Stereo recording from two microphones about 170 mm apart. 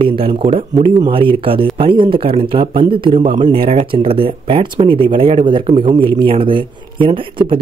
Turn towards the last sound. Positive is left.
turn(degrees=-30)  # may be behind; listen again after turning